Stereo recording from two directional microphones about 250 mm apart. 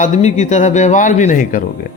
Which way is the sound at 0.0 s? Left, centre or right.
Left.